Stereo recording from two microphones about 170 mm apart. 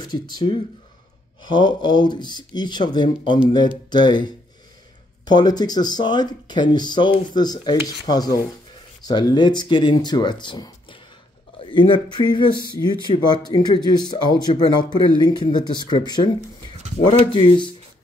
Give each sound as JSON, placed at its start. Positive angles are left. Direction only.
{"t": 0.0, "sound": "speech", "side_deg": 25}